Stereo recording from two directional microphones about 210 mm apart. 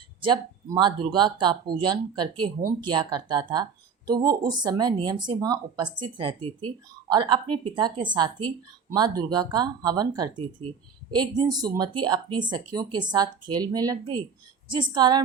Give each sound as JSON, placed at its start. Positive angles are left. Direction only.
{"t": 0.2, "sound": "speech", "side_deg": -20}